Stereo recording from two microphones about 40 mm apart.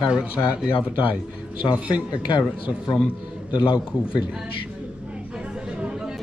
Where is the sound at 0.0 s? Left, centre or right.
Right.